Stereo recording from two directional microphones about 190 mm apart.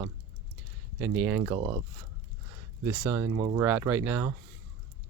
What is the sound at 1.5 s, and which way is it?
Speech, 25° right (ahead or behind).